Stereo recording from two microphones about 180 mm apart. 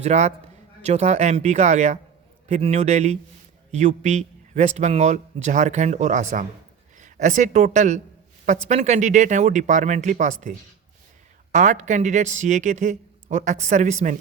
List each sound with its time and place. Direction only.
0.0 s speech: 40° right (ahead or behind)
11.5 s speech: 40° right (ahead or behind)